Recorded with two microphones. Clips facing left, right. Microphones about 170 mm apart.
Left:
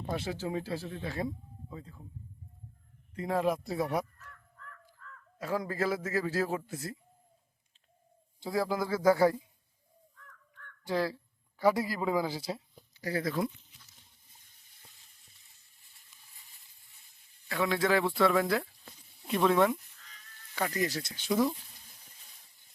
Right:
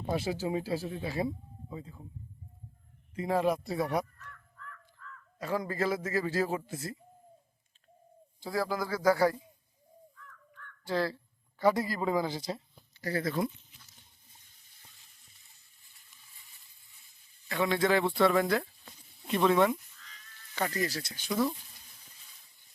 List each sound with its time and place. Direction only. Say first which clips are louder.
0.1 s speech: right 3 dB; 10° right (ahead or behind)
3.2 s a man's voice: right 1 dB; centre (ahead or behind)
4.3 s crow: right 2 dB; 35° left (ahead or behind)
5.4 s a man's voice: even; centre (ahead or behind)
8.4 s speech: left 1 dB; 20° left (ahead or behind)
10.8 s speech: even; 15° left (ahead or behind)
17.5 s a man's voice: right 1 dB; centre (ahead or behind)
20.6 s speech: left 1 dB; 15° left (ahead or behind)